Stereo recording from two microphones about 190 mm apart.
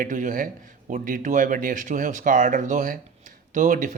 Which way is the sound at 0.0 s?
45° right (ahead or behind).